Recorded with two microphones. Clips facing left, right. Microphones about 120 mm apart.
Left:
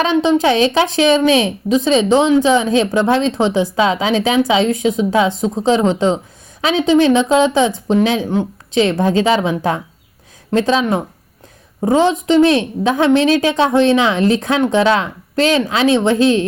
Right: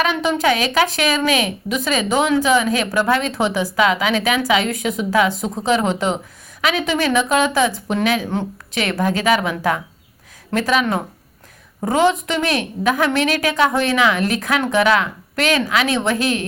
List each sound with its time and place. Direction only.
0.0 s a woman's voice: 20° left (ahead or behind)
6.6 s a woman's voice: 25° left (ahead or behind)
12.2 s a woman's voice: 20° left (ahead or behind)